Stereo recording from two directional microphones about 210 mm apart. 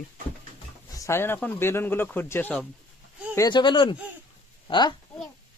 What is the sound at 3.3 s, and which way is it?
A child's voice, 20° left (ahead or behind).